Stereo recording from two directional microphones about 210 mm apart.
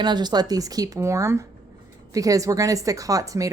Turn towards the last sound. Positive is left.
turn(degrees=-15)  # may be behind; listen again after turning